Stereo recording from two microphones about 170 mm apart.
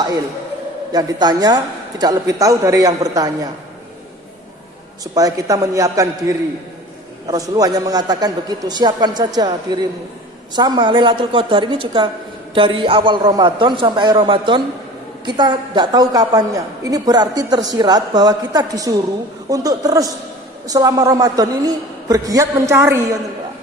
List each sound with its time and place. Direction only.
0.9 s a man's voice: 25° right (ahead or behind)
5.1 s a man's voice: 20° right (ahead or behind)